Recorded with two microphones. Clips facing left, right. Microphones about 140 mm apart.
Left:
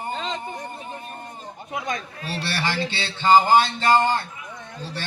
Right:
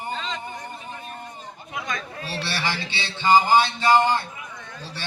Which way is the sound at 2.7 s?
50° left (ahead or behind).